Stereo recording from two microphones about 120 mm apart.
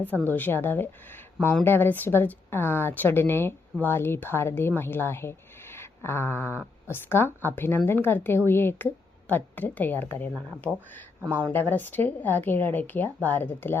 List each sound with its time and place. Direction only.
0.3 s speech: 15° left (ahead or behind)
11.2 s speech: 20° right (ahead or behind)
11.5 s speech: 15° left (ahead or behind)